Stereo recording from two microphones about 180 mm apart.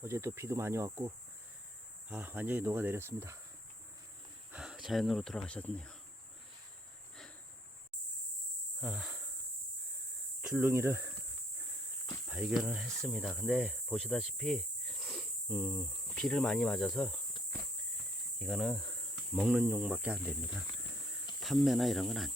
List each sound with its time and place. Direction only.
0.0 s speech: 15° right (ahead or behind)
4.5 s speech: 5° right (ahead or behind)
8.8 s cricket: 5° right (ahead or behind)
10.5 s speech: 10° right (ahead or behind)
12.3 s speech: 5° right (ahead or behind)
18.3 s a sound: centre (ahead or behind)
19.3 s speech: 5° right (ahead or behind)
20.9 s a sound: centre (ahead or behind)
21.4 s speech: centre (ahead or behind)